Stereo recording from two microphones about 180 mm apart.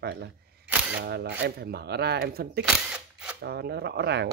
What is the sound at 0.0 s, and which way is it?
Camera, 65° right (ahead or behind).